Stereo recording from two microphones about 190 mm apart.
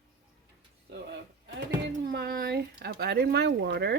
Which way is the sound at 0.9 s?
65° right (ahead or behind).